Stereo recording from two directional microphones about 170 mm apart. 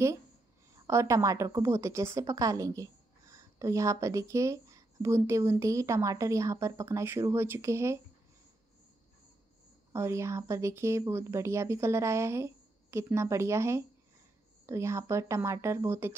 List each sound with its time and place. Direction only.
0.7 s a woman's voice: 15° right (ahead or behind)
9.9 s a woman's voice: 15° right (ahead or behind)